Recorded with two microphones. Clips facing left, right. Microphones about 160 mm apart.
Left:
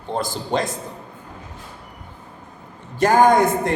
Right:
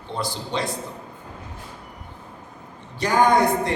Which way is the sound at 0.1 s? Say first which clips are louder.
Left 5 dB; 45° left (ahead or behind).